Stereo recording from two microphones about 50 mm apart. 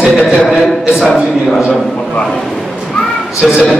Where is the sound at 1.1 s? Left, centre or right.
Centre.